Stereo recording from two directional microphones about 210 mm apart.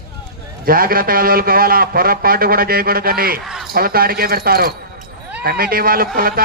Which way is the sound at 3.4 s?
Centre (ahead or behind).